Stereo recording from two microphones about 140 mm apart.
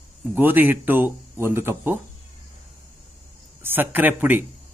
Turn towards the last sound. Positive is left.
turn(degrees=-15)  # may be behind; listen again after turning